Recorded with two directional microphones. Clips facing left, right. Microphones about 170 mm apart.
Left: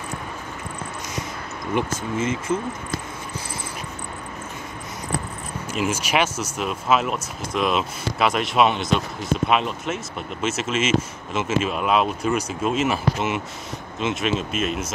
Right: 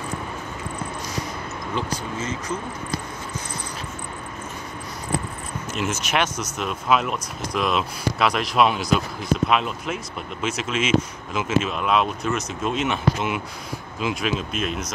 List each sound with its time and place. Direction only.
2.1 s speech: 25° left (ahead or behind)
5.7 s speech: 10° left (ahead or behind)